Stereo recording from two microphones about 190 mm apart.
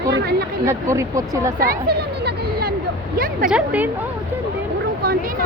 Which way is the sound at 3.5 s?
10° right (ahead or behind).